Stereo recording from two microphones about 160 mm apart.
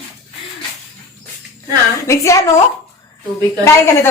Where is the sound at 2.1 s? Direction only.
20° left (ahead or behind).